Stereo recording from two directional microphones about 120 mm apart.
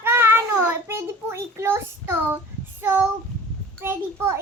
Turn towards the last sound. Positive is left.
turn(degrees=-20)  # may be behind; listen again after turning